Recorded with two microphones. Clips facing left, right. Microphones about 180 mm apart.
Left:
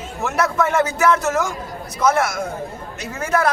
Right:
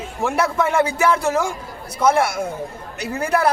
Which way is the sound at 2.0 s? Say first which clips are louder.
Right 1 dB; 30° right (ahead or behind).